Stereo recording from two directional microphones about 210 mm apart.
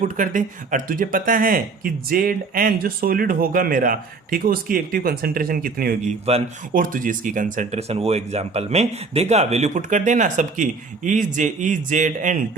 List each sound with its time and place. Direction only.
0.0 s speech: 35° right (ahead or behind)